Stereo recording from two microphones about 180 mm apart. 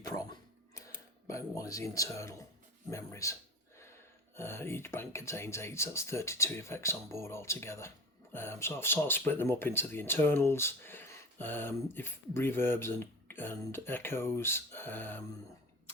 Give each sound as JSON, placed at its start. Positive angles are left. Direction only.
{"t": 0.0, "sound": "a sound", "side_deg": 20}
{"t": 1.3, "sound": "speech", "side_deg": 15}
{"t": 4.4, "sound": "speech", "side_deg": 15}